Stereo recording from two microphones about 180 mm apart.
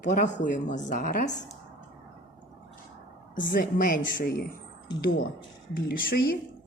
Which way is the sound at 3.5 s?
50° left (ahead or behind).